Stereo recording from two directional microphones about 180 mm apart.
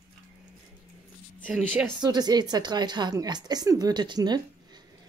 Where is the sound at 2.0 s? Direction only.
20° right (ahead or behind).